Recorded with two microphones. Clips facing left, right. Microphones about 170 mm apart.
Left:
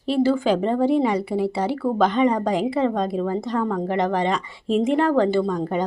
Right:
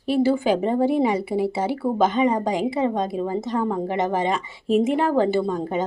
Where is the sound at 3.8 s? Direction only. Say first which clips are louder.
Left 1 dB; 5° right (ahead or behind).